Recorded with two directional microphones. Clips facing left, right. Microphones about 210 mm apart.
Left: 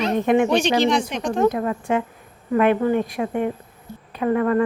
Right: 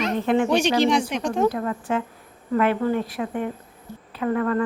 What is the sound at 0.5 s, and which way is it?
Speech, 10° right (ahead or behind).